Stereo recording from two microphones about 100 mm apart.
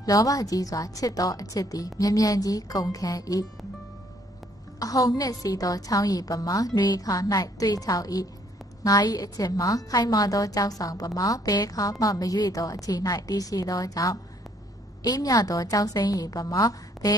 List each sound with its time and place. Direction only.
0.0 s a woman's voice: 35° left (ahead or behind)
4.7 s a woman's voice: 40° left (ahead or behind)